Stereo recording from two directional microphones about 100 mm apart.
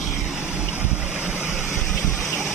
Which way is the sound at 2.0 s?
15° left (ahead or behind).